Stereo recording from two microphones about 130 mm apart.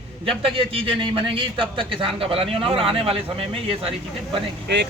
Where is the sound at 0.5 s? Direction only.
45° right (ahead or behind).